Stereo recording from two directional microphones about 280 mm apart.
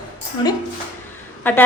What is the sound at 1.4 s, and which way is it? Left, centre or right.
Speech, centre.